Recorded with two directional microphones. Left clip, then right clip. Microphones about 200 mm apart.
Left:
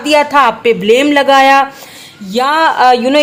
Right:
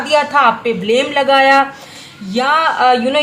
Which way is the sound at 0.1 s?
50° left (ahead or behind).